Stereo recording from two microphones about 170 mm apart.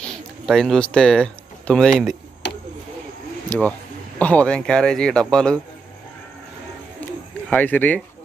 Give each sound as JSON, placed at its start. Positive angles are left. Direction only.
{"t": 0.1, "sound": "speech", "side_deg": 5}
{"t": 2.4, "sound": "a sound", "side_deg": 90}
{"t": 3.4, "sound": "speech", "side_deg": 10}
{"t": 7.4, "sound": "speech", "side_deg": 10}